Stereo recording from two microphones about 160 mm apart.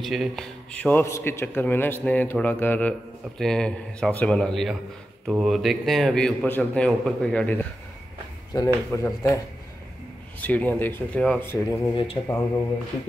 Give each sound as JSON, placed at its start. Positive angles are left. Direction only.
{"t": 0.0, "sound": "a man's voice", "side_deg": 0}
{"t": 10.4, "sound": "a man's voice", "side_deg": 10}
{"t": 11.9, "sound": "speech", "side_deg": 35}